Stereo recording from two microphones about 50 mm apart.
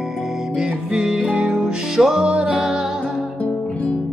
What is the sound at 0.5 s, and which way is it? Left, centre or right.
Music, centre.